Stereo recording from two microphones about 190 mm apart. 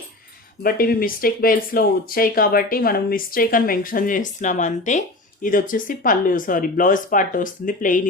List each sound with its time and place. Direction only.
0.6 s speech: 50° left (ahead or behind)